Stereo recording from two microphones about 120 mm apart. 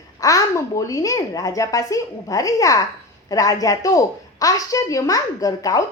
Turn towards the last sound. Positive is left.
turn(degrees=30)  # may be behind; listen again after turning